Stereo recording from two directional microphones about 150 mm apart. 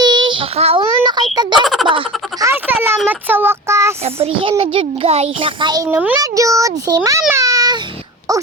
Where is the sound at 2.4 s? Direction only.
15° right (ahead or behind).